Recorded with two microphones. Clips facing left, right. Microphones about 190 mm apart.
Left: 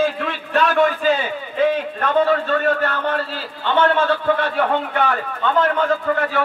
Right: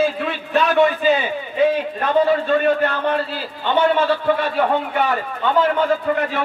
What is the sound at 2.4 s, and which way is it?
A man's voice, 15° right (ahead or behind).